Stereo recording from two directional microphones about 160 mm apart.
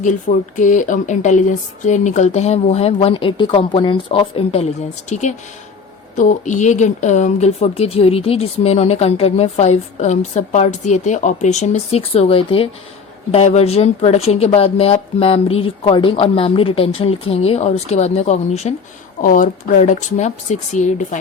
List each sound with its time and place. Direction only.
0.0 s speech: 55° left (ahead or behind)
19.2 s speech: 55° left (ahead or behind)